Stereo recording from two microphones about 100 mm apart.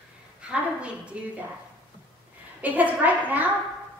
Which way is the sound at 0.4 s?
10° right (ahead or behind).